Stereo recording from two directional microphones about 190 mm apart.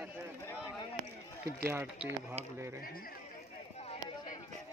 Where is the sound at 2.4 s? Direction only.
35° right (ahead or behind).